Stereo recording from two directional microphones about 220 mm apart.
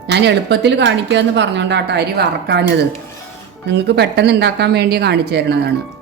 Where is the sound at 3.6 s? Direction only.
50° right (ahead or behind).